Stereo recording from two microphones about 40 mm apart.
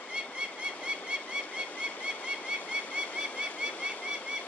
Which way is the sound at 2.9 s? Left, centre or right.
Right.